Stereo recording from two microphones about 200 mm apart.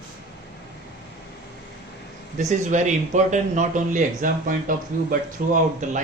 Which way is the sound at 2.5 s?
35° right (ahead or behind).